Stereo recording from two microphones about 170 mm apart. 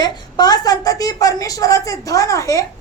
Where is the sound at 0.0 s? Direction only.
25° left (ahead or behind).